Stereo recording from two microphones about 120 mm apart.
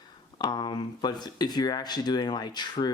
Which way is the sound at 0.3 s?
35° left (ahead or behind).